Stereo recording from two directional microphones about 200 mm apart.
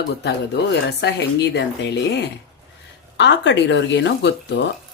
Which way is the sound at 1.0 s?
55° left (ahead or behind).